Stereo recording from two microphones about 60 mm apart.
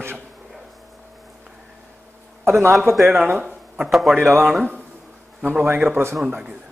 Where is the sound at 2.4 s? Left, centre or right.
Right.